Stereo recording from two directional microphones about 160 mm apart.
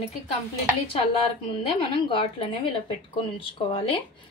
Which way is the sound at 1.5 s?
35° left (ahead or behind).